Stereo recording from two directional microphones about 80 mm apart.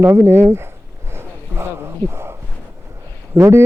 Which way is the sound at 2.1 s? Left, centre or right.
Right.